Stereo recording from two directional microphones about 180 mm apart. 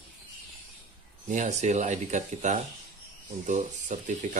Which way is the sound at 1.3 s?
40° right (ahead or behind).